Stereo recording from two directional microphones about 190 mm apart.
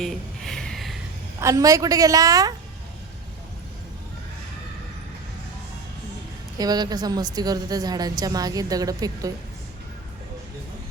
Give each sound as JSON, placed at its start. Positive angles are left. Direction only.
{"t": 0.0, "sound": "a sound", "side_deg": 0}
{"t": 1.4, "sound": "a woman's voice", "side_deg": -15}
{"t": 6.6, "sound": "a woman's voice", "side_deg": -20}